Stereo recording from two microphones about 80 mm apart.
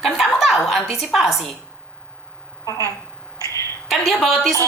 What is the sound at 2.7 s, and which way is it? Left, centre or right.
Speech, left.